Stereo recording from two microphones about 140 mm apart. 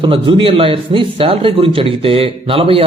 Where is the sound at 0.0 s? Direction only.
35° right (ahead or behind).